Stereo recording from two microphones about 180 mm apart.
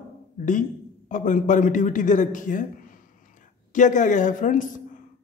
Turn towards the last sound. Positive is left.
turn(degrees=45)  # may be behind; listen again after turning